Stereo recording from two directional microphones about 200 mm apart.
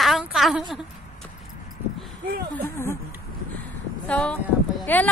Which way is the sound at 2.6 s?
10° left (ahead or behind).